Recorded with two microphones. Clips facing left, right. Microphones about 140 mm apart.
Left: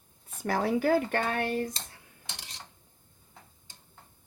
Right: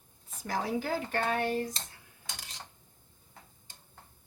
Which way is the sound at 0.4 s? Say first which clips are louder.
Left 6 dB; 60° left (ahead or behind).